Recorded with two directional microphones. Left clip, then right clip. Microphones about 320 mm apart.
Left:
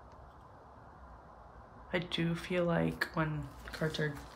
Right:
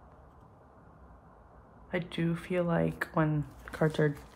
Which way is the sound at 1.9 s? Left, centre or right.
Centre.